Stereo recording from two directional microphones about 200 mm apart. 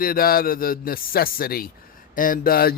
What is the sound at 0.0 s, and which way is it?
A man's voice, 45° left (ahead or behind).